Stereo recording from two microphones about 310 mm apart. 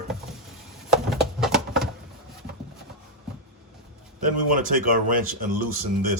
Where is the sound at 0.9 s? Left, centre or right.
Centre.